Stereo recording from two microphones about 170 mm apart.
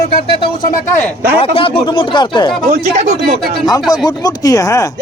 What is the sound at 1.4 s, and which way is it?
A man's voice, 35° left (ahead or behind).